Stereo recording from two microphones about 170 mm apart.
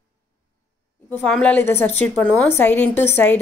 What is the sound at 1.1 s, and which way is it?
A woman's voice, 10° left (ahead or behind).